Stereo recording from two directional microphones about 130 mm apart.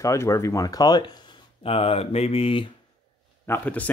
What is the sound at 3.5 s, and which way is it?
Speech, 10° left (ahead or behind).